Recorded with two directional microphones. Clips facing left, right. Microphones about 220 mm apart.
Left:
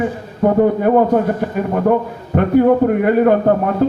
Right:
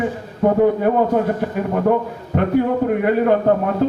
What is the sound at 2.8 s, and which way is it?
Speech, 50° left (ahead or behind).